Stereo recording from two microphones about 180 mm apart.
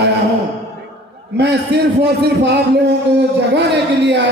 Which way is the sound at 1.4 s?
70° right (ahead or behind).